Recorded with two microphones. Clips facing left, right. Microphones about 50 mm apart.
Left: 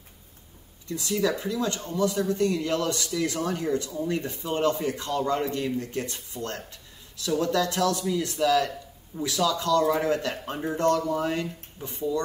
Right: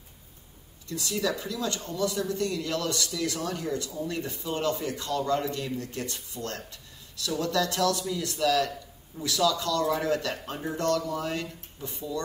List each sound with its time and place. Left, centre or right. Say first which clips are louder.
0.8 s speech: left 3 dB; left